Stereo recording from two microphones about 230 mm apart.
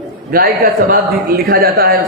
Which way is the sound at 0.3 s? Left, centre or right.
Right.